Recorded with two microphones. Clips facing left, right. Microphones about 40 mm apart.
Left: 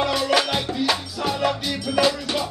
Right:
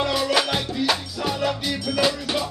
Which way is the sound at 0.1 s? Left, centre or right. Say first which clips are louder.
Left 1 dB; centre.